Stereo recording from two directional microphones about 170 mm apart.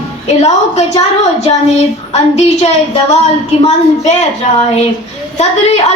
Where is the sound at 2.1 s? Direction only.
40° left (ahead or behind).